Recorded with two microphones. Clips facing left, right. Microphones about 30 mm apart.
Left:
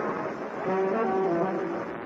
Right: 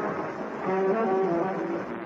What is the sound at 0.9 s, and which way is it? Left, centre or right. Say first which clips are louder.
Brass instrument: right 1 dB; centre.